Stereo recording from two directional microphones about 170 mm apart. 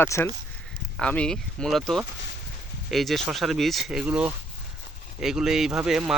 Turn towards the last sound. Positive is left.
turn(degrees=-5)  # may be behind; listen again after turning